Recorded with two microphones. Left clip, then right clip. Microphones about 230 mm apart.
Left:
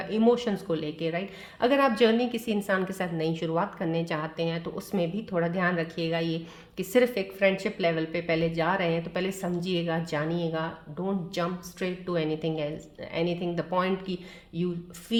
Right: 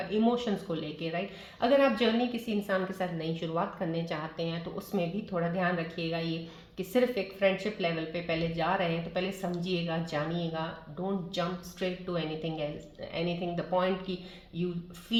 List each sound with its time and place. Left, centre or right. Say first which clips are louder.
0.1 s a woman's voice: left 6 dB; left